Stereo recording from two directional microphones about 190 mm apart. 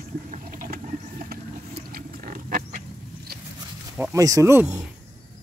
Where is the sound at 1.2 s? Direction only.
50° right (ahead or behind).